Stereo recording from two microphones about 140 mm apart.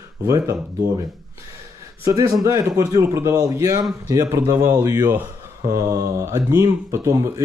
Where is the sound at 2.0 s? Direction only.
25° right (ahead or behind).